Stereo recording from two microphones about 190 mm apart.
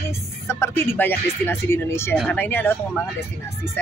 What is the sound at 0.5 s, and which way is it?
Speech, 10° left (ahead or behind).